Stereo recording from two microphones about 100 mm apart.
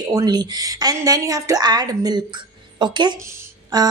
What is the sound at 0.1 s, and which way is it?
A woman's voice, 40° right (ahead or behind).